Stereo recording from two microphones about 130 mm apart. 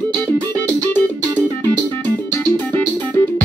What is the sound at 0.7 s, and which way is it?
Music, 15° left (ahead or behind).